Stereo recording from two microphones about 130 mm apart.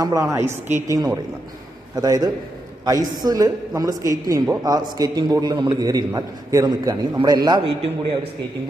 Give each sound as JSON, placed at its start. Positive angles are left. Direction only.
{"t": 0.0, "sound": "a woman's voice", "side_deg": -25}
{"t": 0.9, "sound": "a woman's voice", "side_deg": -30}
{"t": 7.6, "sound": "a man's voice", "side_deg": -45}